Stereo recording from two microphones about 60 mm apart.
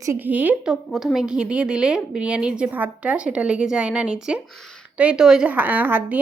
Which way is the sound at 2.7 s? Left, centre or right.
Right.